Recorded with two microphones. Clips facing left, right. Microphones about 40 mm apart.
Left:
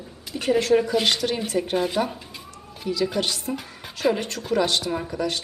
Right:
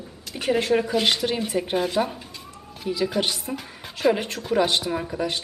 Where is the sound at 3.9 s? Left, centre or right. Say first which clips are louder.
Right 1 dB; centre.